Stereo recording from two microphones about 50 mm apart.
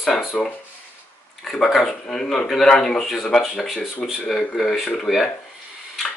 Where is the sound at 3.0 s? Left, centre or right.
Centre.